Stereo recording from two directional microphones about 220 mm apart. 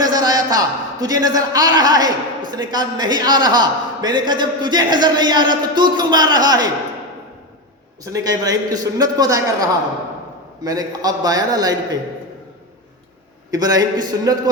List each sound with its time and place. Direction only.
0.0 s a man's voice: 20° right (ahead or behind)
8.0 s a man's voice: 15° right (ahead or behind)
13.5 s a man's voice: 15° right (ahead or behind)